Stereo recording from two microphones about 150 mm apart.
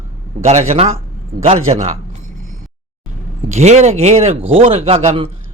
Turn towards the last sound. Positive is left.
turn(degrees=-40)  # may be behind; listen again after turning